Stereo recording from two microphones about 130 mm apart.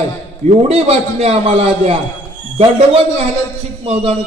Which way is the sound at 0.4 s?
55° right (ahead or behind).